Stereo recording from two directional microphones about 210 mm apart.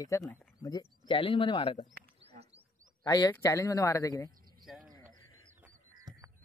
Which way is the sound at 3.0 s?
20° left (ahead or behind).